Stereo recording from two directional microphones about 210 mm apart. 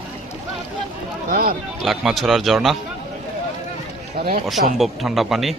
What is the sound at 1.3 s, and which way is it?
Speech, 45° right (ahead or behind).